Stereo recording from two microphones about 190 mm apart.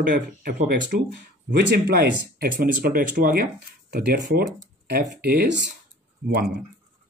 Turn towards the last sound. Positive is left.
turn(degrees=-55)  # may be behind; listen again after turning